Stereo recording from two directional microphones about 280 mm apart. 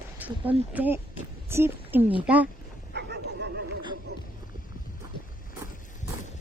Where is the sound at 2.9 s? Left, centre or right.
Right.